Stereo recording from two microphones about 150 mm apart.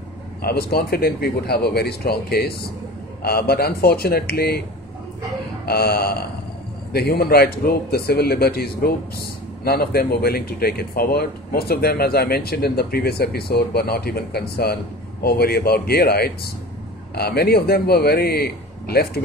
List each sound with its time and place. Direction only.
0.4 s speech: 90° left
5.7 s speech: 90° left